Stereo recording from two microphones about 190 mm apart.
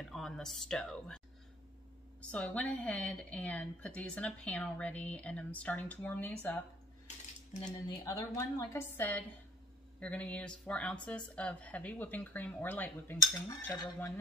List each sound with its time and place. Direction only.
0.0 s speech: centre (ahead or behind)
2.3 s a woman's voice: 5° left (ahead or behind)
7.9 s a woman's voice: 20° left (ahead or behind)